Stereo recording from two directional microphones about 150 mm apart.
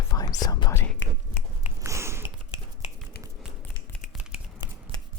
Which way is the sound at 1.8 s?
20° right (ahead or behind).